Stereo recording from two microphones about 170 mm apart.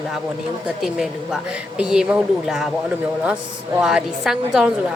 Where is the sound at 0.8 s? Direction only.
Centre (ahead or behind).